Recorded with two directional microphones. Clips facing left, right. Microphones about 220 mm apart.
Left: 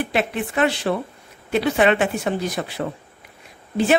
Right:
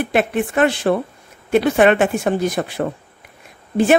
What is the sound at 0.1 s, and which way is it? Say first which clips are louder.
A woman's voice: right 5 dB; 50° right (ahead or behind).